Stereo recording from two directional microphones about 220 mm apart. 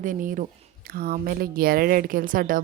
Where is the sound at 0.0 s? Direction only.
35° right (ahead or behind).